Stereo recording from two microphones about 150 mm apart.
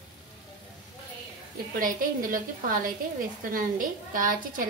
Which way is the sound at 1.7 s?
65° right (ahead or behind).